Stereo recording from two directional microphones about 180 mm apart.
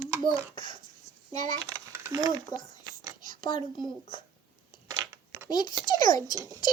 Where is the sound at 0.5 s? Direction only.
25° left (ahead or behind).